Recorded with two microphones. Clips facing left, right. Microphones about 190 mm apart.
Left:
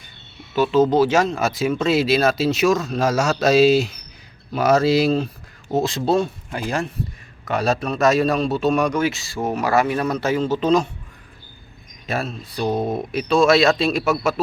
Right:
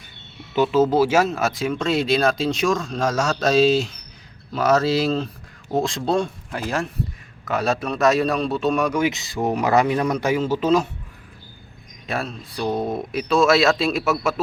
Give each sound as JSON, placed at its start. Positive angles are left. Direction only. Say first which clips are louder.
{"t": 0.5, "sound": "speech", "louder": "left 1 dB", "side_deg": -15}
{"t": 9.0, "sound": "speech", "louder": "even", "side_deg": -20}
{"t": 12.0, "sound": "speech", "louder": "left 2 dB", "side_deg": 0}